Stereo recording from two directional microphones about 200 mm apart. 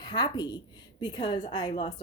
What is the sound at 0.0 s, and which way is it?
A woman's voice, 20° left (ahead or behind).